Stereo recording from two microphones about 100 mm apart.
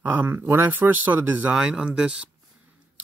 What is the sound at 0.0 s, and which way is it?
Speech, 20° right (ahead or behind).